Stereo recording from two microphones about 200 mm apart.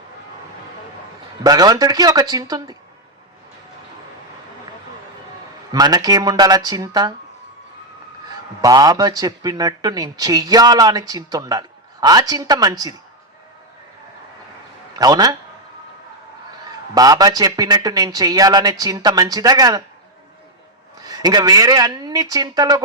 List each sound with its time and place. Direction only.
1.5 s speech: 20° right (ahead or behind)
5.7 s speech: 20° right (ahead or behind)
8.6 s speech: 20° right (ahead or behind)
14.9 s speech: 20° right (ahead or behind)
16.9 s speech: 20° right (ahead or behind)
21.0 s speech: 20° right (ahead or behind)